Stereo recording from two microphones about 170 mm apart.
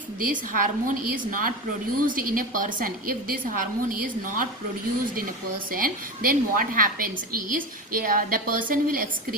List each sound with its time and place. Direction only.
0.3 s a woman's voice: 55° right (ahead or behind)
5.7 s a woman's voice: 55° right (ahead or behind)